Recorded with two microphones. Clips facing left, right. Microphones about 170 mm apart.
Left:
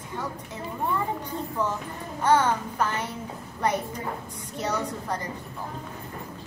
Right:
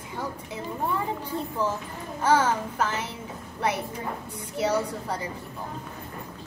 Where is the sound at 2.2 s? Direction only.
10° right (ahead or behind).